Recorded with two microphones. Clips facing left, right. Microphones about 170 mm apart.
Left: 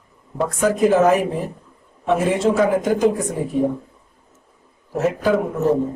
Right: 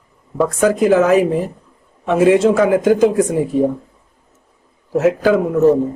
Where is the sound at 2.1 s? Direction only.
90° right.